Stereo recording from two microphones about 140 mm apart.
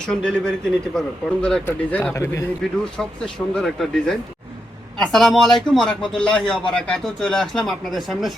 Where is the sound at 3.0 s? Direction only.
5° left (ahead or behind).